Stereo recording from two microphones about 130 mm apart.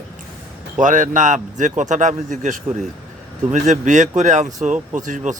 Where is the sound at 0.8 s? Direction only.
80° right.